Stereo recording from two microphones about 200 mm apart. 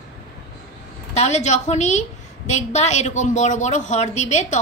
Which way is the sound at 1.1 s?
35° left (ahead or behind).